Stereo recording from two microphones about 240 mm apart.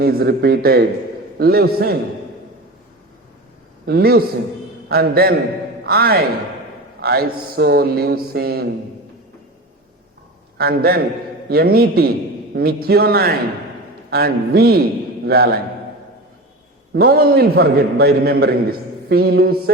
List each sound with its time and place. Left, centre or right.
0.0 s a man's voice: right
3.8 s a man's voice: right
10.6 s a man's voice: right
16.9 s a man's voice: right